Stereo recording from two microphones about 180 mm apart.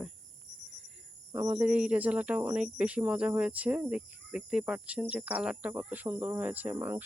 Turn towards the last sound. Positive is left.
turn(degrees=-10)  # may be behind; listen again after turning